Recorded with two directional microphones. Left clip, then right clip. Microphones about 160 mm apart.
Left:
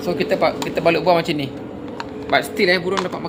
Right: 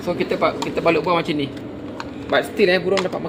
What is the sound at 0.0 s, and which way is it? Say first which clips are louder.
Speech: left 2 dB; 60° left (ahead or behind).